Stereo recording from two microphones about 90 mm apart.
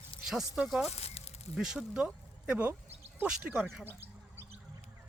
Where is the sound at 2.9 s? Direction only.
25° right (ahead or behind).